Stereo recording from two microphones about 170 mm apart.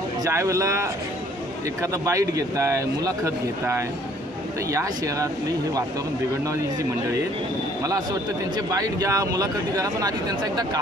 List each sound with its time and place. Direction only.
0.2 s a man's voice: 15° right (ahead or behind)
7.8 s a man's voice: 20° right (ahead or behind)